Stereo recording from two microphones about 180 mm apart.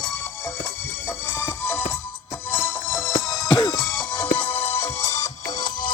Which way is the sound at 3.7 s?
Centre (ahead or behind).